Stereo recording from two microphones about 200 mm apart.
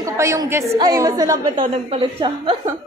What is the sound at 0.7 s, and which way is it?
A woman's voice, 15° right (ahead or behind).